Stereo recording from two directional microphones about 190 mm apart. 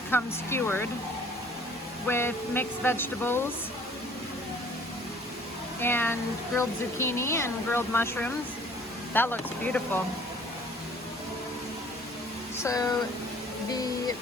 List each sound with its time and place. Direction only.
0.1 s speech: 10° left (ahead or behind)
2.0 s speech: 10° left (ahead or behind)
5.8 s speech: 10° left (ahead or behind)
12.6 s speech: 20° left (ahead or behind)